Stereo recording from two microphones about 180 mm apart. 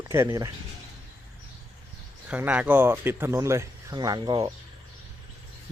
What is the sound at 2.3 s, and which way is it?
Speech, 5° right (ahead or behind).